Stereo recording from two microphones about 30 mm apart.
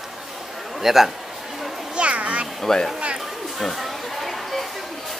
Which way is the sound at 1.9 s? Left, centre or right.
Right.